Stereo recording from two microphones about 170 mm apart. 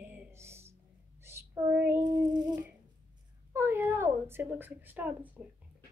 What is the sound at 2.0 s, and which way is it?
Speech, 25° right (ahead or behind).